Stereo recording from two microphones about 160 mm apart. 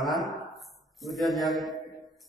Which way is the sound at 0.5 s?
Centre (ahead or behind).